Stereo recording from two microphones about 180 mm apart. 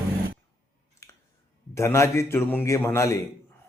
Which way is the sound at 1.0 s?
15° left (ahead or behind).